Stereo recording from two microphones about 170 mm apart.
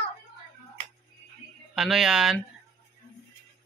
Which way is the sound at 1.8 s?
5° right (ahead or behind).